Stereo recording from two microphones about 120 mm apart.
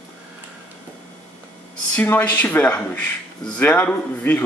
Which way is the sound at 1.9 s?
15° left (ahead or behind).